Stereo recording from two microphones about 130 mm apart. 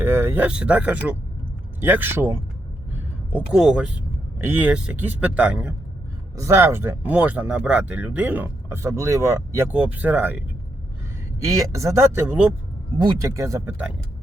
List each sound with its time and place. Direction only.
0.0 s speech: 20° right (ahead or behind)
6.3 s speech: 20° right (ahead or behind)
11.4 s speech: 25° right (ahead or behind)
13.0 s speech: 25° right (ahead or behind)